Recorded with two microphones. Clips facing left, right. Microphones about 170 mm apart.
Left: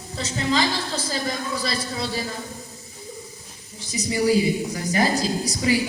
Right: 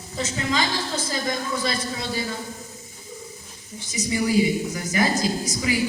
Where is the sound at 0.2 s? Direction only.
35° left (ahead or behind).